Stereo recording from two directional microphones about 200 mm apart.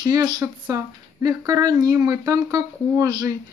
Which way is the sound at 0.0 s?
20° right (ahead or behind).